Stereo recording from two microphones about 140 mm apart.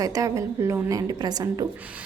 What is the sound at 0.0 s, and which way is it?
A woman's voice, 25° right (ahead or behind).